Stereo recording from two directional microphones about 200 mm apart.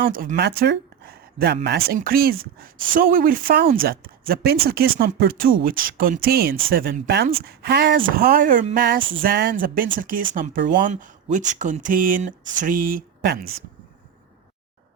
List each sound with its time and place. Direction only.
0.1 s speech: 45° right (ahead or behind)
7.1 s speech: 55° right (ahead or behind)
9.0 s a sound: 25° right (ahead or behind)
9.2 s speech: 45° right (ahead or behind)